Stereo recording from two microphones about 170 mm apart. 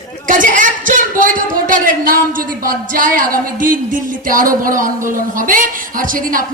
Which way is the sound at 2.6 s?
55° right (ahead or behind).